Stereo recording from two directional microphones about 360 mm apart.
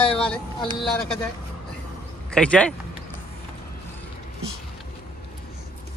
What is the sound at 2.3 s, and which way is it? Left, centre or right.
Speech, centre.